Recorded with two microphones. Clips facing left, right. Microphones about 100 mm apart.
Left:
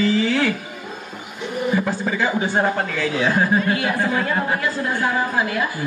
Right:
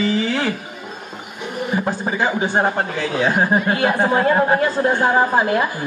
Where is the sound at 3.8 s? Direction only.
50° right (ahead or behind).